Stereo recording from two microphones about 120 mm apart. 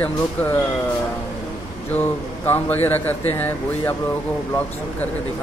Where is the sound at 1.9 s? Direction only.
15° left (ahead or behind).